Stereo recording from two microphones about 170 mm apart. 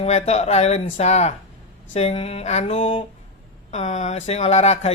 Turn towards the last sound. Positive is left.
turn(degrees=40)  # may be behind; listen again after turning